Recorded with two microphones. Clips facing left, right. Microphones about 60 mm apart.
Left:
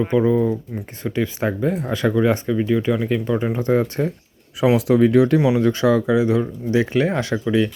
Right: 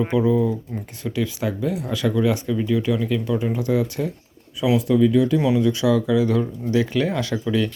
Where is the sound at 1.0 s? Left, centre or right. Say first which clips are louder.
Left 3 dB; left.